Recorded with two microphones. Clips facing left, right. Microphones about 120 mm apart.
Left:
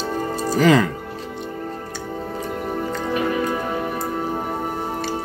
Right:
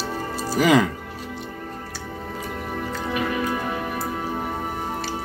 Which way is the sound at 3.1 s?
30° left (ahead or behind).